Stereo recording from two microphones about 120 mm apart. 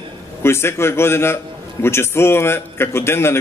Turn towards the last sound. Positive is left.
turn(degrees=20)  # may be behind; listen again after turning